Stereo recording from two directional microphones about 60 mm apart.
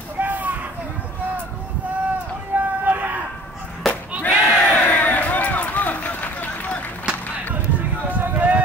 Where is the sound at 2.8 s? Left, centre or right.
Right.